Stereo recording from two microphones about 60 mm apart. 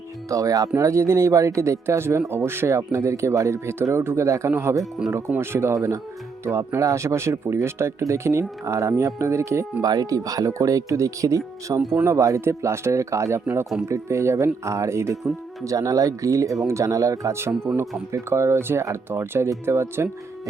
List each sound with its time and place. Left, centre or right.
0.3 s speech: right
0.8 s speech: right
2.6 s speech: right
5.0 s speech: centre
5.4 s speech: right
5.7 s speech: right
9.8 s speech: right
15.6 s speech: right
18.1 s speech: right